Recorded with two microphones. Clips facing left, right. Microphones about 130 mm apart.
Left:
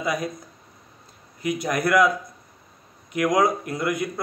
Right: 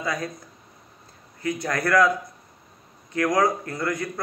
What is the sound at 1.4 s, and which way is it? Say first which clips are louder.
Speech: left 2 dB; 15° left (ahead or behind).